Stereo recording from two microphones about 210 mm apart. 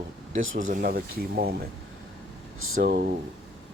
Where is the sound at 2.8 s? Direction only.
45° right (ahead or behind).